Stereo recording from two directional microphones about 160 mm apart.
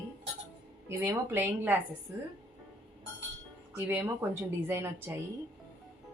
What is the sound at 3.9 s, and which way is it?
A woman's voice, 15° right (ahead or behind).